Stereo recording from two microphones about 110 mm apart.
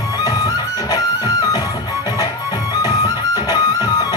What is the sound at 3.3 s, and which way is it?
Music, 35° left (ahead or behind).